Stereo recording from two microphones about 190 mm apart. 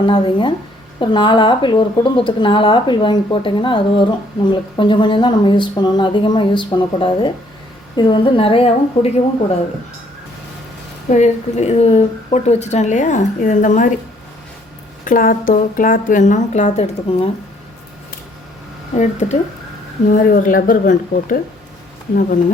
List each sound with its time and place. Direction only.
0.0 s a woman's voice: 25° left (ahead or behind)
11.1 s a woman's voice: 35° left (ahead or behind)
15.0 s a woman's voice: 45° left (ahead or behind)
18.9 s a woman's voice: 35° left (ahead or behind)
20.1 s a woman's voice: 45° left (ahead or behind)